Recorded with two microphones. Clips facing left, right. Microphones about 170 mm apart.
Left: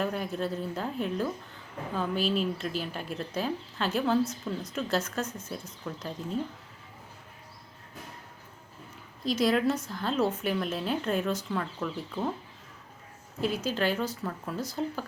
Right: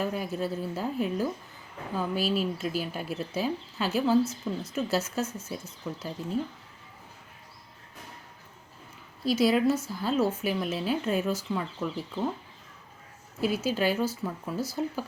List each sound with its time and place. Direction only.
0.0 s speech: 5° right (ahead or behind)
9.2 s speech: 5° right (ahead or behind)
13.4 s a woman's voice: 5° right (ahead or behind)